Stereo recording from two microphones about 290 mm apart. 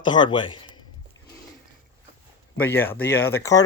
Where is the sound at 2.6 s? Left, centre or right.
Centre.